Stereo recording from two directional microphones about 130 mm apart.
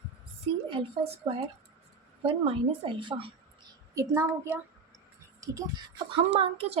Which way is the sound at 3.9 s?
25° right (ahead or behind).